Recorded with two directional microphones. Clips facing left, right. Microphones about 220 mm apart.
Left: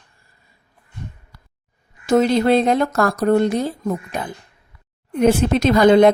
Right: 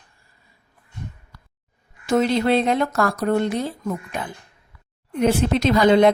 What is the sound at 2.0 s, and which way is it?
A woman's voice, 40° left (ahead or behind).